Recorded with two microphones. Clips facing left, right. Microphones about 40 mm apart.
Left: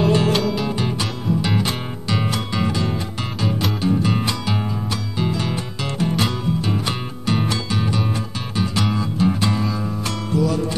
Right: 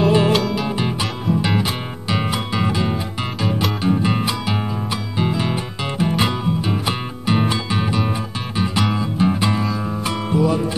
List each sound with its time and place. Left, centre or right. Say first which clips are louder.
0.0 s music: right 2 dB; centre
0.7 s music: right 1 dB; centre